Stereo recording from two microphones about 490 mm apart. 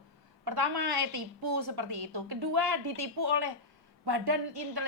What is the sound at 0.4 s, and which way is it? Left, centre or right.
A woman's voice, right.